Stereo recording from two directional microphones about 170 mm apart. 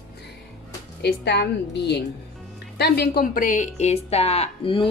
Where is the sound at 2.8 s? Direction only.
70° left (ahead or behind).